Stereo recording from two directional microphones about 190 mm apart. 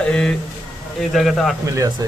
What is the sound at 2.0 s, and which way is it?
Speech, 20° right (ahead or behind).